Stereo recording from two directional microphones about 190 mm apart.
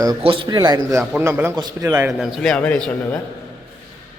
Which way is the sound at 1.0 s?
5° right (ahead or behind).